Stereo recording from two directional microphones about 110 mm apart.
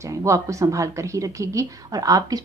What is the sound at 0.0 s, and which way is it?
A woman's voice, 30° right (ahead or behind).